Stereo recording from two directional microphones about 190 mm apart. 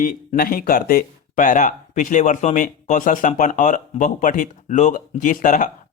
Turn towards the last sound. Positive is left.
turn(degrees=40)  # may be behind; listen again after turning